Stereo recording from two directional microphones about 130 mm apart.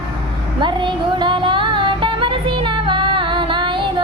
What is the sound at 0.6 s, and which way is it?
Music, 35° right (ahead or behind).